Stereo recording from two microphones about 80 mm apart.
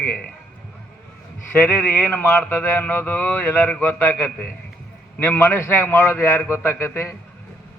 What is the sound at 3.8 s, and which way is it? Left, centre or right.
A man's voice, left.